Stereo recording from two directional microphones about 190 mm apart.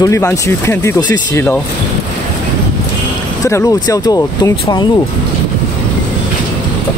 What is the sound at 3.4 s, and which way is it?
Speech, 15° left (ahead or behind).